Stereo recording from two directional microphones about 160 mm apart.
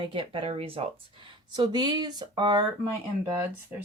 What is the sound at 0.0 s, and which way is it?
Speech, 35° right (ahead or behind).